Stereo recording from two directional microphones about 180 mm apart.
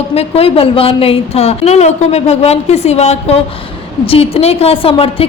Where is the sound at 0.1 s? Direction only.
35° left (ahead or behind).